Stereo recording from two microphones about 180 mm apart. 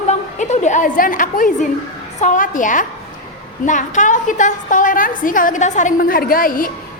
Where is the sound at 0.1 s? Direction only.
40° left (ahead or behind).